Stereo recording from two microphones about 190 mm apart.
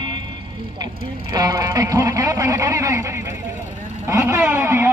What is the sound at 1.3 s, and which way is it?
Speech, 20° right (ahead or behind).